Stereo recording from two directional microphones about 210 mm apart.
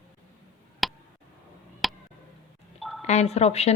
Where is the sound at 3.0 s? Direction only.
30° left (ahead or behind).